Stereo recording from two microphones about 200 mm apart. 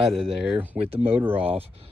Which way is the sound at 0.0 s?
Centre (ahead or behind).